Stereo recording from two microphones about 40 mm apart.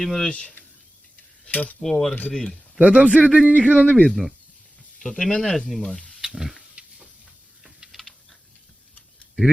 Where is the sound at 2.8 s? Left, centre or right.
Right.